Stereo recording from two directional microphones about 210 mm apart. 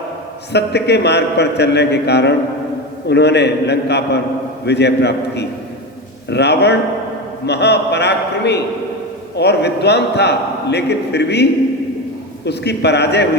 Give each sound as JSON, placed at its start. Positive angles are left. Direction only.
{"t": 0.5, "sound": "a man's voice", "side_deg": 55}
{"t": 12.5, "sound": "a man's voice", "side_deg": 55}